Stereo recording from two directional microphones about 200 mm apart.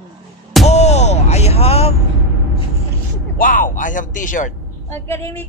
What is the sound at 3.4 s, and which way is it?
A man's voice, 40° left (ahead or behind).